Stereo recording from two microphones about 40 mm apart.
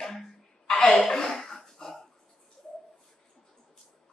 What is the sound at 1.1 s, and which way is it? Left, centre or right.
Cough, centre.